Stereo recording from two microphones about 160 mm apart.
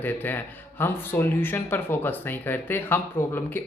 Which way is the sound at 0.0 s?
10° left (ahead or behind).